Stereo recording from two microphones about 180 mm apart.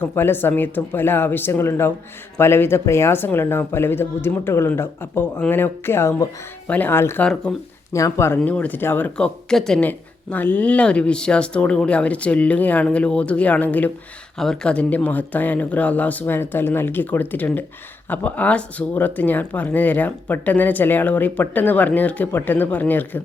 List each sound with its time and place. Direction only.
0.0 s speech: 10° left (ahead or behind)